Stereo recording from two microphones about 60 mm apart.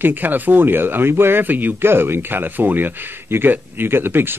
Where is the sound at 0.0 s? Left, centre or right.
Right.